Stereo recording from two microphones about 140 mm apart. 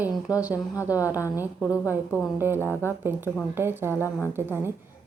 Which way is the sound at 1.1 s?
15° right (ahead or behind).